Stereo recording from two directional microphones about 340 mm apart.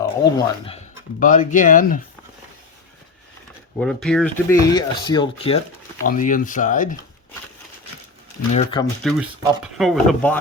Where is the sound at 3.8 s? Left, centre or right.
Centre; by 6.9 s left.